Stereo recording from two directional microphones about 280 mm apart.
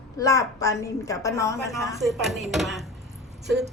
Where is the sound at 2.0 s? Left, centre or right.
Centre.